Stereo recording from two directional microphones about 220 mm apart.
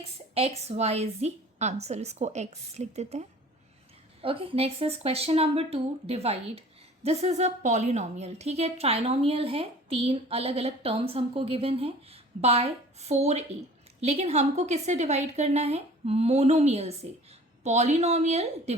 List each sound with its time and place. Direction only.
0.0 s a woman's voice: 30° right (ahead or behind)